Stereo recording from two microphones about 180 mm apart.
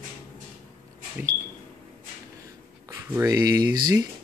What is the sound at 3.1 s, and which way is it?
Speech, 20° right (ahead or behind).